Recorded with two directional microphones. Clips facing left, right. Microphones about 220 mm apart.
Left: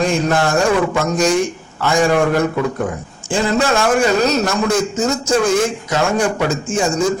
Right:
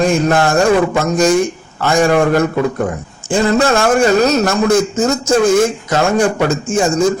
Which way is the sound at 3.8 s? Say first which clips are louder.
Right 3 dB; 45° right (ahead or behind).